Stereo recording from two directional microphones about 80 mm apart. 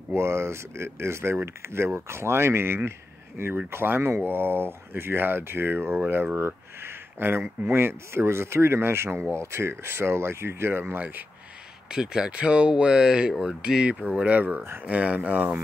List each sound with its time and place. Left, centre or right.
0.1 s speech: right
11.9 s speech: centre